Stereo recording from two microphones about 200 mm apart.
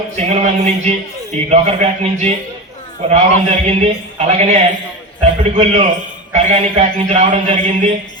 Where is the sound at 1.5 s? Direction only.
35° right (ahead or behind).